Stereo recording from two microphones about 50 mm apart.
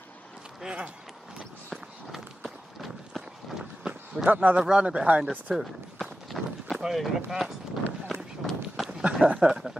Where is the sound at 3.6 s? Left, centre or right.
Centre.